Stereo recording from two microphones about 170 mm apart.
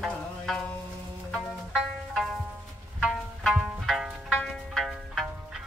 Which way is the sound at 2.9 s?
Centre (ahead or behind).